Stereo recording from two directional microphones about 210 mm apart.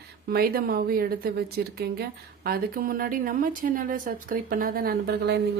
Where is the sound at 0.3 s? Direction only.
45° right (ahead or behind).